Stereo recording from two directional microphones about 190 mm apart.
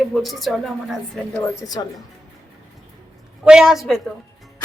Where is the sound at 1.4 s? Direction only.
20° left (ahead or behind).